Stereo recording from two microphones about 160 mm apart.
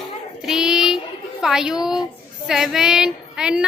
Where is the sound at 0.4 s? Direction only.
5° right (ahead or behind).